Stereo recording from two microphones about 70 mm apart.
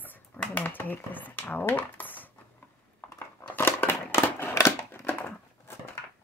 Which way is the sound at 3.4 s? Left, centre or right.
Left.